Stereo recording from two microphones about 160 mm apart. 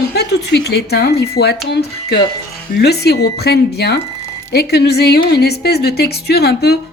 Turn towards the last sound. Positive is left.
turn(degrees=85)